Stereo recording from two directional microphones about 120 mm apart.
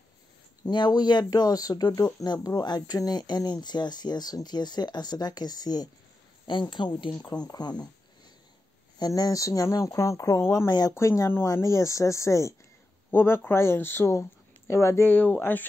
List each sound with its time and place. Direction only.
0.7 s speech: 40° left (ahead or behind)
9.0 s speech: 35° left (ahead or behind); by 15.3 s 15° left (ahead or behind)